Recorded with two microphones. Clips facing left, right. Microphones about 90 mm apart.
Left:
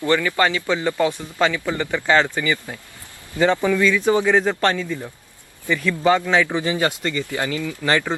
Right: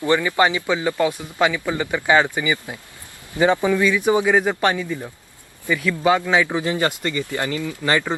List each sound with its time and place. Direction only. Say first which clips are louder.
0.0 s a man's voice: right 1 dB; 15° right (ahead or behind)
7.3 s speech: even; 20° right (ahead or behind)
7.9 s speech: even; 5° right (ahead or behind)